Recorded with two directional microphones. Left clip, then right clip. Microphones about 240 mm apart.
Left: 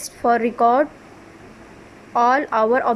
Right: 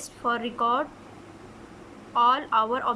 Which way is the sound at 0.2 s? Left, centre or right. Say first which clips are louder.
Left 9 dB; centre.